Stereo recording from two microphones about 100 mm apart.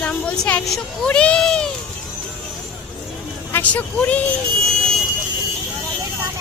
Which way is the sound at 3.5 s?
15° left (ahead or behind).